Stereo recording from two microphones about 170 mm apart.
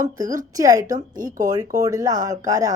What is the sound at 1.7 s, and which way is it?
Speech, 20° right (ahead or behind).